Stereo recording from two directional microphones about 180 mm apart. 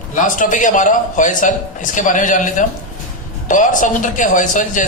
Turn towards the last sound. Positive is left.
turn(degrees=45)  # may be behind; listen again after turning